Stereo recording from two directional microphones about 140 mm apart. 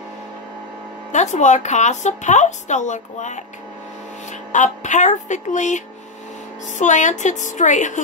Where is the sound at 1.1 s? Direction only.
55° left (ahead or behind).